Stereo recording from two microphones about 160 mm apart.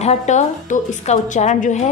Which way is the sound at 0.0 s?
45° left (ahead or behind).